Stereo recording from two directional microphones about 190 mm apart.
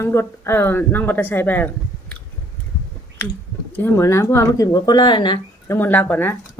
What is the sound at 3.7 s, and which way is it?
Speech, 10° left (ahead or behind).